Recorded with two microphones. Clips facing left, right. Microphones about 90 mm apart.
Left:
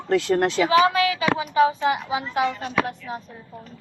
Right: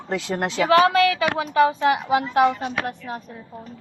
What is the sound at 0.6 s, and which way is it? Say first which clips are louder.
A woman's voice: right 5 dB; 70° right (ahead or behind).